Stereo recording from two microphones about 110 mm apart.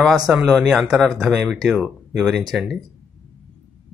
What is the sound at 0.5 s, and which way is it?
Speech, 5° right (ahead or behind).